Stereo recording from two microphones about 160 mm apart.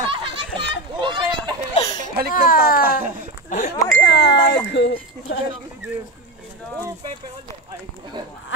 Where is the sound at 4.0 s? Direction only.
90° left.